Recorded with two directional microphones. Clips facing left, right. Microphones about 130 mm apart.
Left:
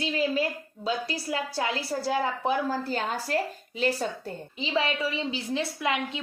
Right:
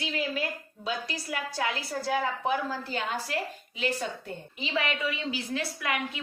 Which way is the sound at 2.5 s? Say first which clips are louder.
Left 3 dB; 40° left (ahead or behind).